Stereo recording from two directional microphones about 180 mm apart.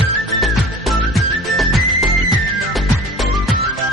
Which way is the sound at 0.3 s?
Centre (ahead or behind).